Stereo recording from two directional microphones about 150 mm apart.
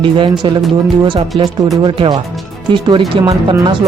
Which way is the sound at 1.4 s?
25° right (ahead or behind).